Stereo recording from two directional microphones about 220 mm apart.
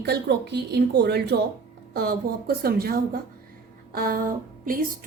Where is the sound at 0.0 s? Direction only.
50° right (ahead or behind).